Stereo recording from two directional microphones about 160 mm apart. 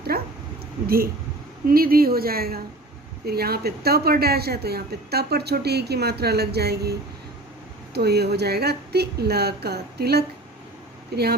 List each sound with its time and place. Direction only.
0.1 s a woman's voice: 70° right (ahead or behind)
1.6 s a woman's voice: 65° right (ahead or behind); by 6.9 s 90° right
7.9 s a woman's voice: 90° right